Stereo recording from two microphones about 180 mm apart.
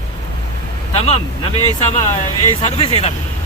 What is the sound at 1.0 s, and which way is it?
Speech, 35° left (ahead or behind).